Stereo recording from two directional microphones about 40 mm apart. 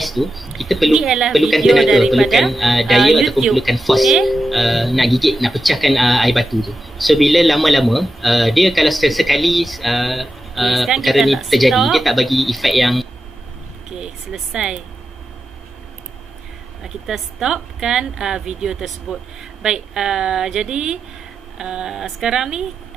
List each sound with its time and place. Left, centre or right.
0.0 s speech: centre
13.8 s a sound: centre
16.8 s a woman's voice: centre